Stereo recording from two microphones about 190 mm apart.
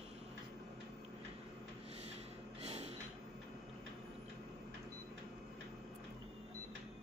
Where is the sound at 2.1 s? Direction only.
30° right (ahead or behind).